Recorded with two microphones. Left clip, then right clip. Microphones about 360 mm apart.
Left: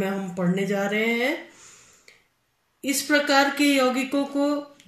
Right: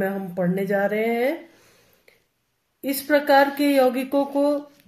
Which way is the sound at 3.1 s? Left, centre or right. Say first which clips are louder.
Right 3 dB; right.